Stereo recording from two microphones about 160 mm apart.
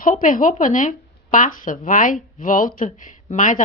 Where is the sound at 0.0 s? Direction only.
55° left (ahead or behind).